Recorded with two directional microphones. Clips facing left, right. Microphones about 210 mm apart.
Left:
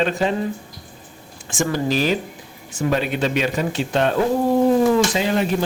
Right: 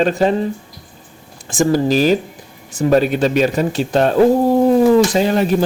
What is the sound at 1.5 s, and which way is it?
Speech, 40° right (ahead or behind).